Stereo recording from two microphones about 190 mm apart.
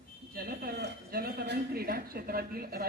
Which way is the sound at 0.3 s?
50° right (ahead or behind).